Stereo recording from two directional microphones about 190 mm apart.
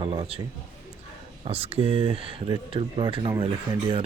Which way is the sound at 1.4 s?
30° right (ahead or behind).